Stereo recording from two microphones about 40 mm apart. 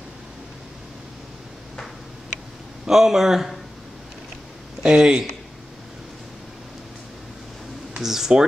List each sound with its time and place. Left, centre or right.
2.9 s speech: centre
4.8 s speech: right
8.0 s speech: centre